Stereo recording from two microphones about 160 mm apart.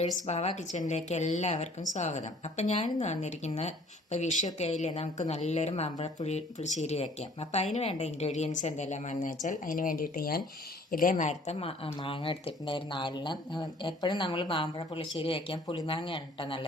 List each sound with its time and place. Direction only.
0.2 s speech: 45° left (ahead or behind); by 10.4 s 70° left (ahead or behind)
10.9 s speech: 55° left (ahead or behind); by 16.6 s 30° left (ahead or behind)